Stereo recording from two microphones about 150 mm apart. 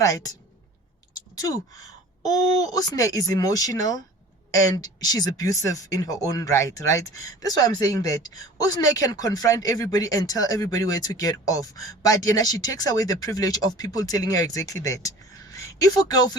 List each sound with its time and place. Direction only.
0.0 s a woman's voice: 20° left (ahead or behind)